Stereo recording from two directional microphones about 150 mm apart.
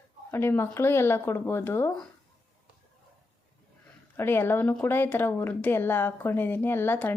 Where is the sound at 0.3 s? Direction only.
15° left (ahead or behind).